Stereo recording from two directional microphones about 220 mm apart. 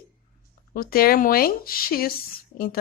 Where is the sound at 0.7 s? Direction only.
40° left (ahead or behind).